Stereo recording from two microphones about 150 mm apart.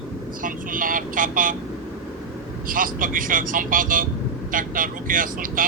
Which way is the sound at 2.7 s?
65° right (ahead or behind).